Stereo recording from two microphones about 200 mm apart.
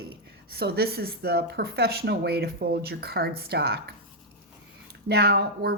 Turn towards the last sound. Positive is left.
turn(degrees=-50)  # may be behind; listen again after turning